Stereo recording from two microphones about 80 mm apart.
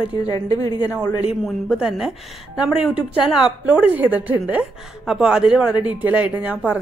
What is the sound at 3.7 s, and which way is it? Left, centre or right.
Speech, centre.